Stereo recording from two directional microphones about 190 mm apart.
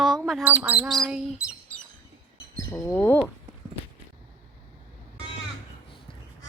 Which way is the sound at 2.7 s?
10° left (ahead or behind).